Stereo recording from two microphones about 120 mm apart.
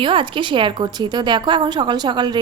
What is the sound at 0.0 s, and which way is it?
A woman's voice, 45° right (ahead or behind).